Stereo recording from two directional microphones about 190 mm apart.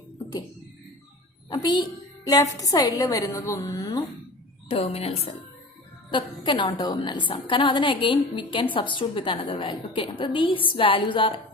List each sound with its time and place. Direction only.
1.5 s a woman's voice: 25° left (ahead or behind)
4.7 s a woman's voice: 30° left (ahead or behind)